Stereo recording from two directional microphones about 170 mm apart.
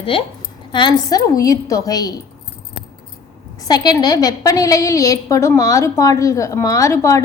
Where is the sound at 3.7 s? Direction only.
25° left (ahead or behind).